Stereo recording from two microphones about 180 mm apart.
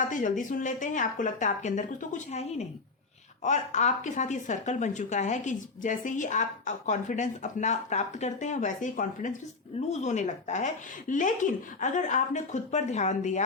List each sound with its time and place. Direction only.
0.1 s speech: 45° left (ahead or behind)